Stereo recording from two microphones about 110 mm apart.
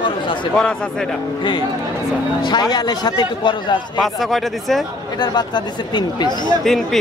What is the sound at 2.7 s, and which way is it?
Speech, 40° left (ahead or behind).